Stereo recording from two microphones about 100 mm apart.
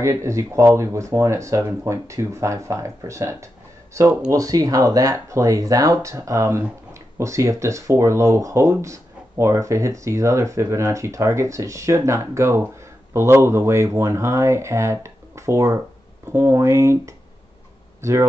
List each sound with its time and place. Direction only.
0.0 s speech: 30° right (ahead or behind)